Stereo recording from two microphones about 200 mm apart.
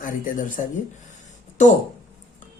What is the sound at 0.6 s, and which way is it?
Speech, 40° left (ahead or behind).